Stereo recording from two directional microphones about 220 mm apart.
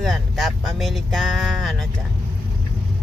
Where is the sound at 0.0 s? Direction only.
Centre (ahead or behind).